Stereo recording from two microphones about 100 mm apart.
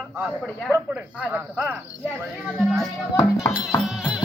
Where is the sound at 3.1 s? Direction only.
25° left (ahead or behind).